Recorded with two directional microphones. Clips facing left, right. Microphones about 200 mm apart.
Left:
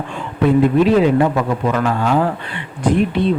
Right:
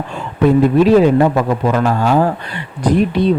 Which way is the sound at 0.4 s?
40° right (ahead or behind).